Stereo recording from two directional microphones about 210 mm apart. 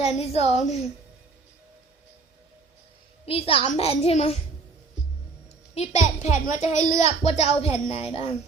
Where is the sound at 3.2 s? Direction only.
25° left (ahead or behind).